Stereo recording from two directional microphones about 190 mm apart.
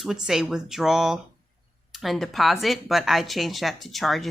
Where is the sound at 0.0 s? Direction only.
Centre (ahead or behind).